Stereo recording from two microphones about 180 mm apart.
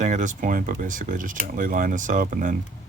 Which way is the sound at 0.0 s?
40° right (ahead or behind).